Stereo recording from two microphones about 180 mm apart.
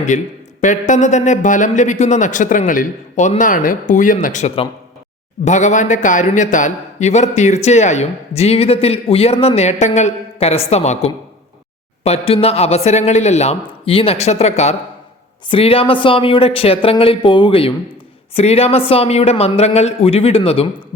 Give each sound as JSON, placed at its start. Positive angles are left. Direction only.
{"t": 0.1, "sound": "a man's voice", "side_deg": 40}